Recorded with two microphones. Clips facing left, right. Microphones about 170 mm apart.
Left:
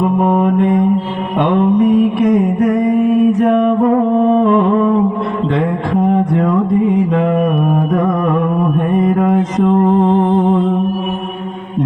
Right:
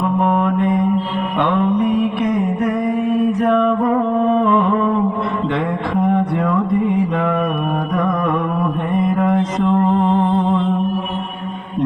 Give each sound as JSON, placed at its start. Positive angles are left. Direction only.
{"t": 9.1, "sound": "mantra", "side_deg": 45}